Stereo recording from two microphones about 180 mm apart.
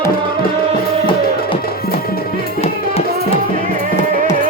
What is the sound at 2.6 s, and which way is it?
Music, 35° left (ahead or behind).